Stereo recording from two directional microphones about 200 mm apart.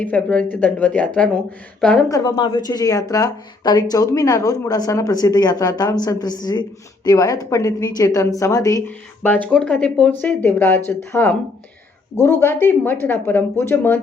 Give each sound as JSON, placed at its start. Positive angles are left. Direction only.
{"t": 0.0, "sound": "speech", "side_deg": 5}
{"t": 2.0, "sound": "speech", "side_deg": 20}